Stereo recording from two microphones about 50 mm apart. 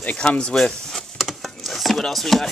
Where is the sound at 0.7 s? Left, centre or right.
Centre.